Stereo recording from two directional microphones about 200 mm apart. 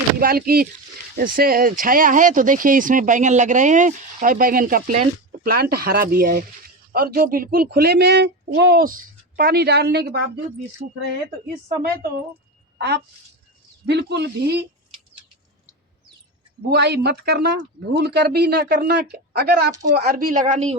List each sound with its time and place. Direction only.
0.2 s speech: 50° right (ahead or behind)
13.8 s speech: 60° right (ahead or behind)
16.6 s speech: 55° right (ahead or behind)
19.9 s a woman's voice: 45° right (ahead or behind)